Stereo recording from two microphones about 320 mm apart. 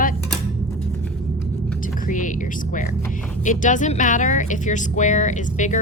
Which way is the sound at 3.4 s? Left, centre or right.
Left.